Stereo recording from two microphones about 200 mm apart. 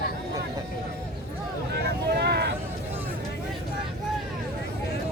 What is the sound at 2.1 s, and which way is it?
Vehicle, 55° right (ahead or behind).